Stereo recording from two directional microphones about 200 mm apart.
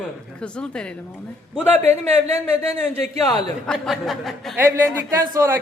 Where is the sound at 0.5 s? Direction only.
5° left (ahead or behind).